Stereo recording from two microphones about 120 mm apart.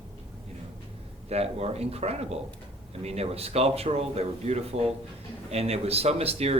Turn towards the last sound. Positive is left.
turn(degrees=-55)  # may be behind; listen again after turning